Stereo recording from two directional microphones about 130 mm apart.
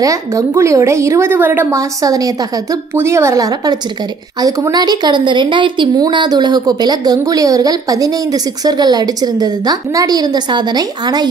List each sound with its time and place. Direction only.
0.0 s a woman's voice: 25° right (ahead or behind)